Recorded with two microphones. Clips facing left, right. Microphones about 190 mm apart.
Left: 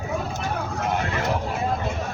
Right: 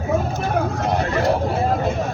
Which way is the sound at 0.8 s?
35° right (ahead or behind).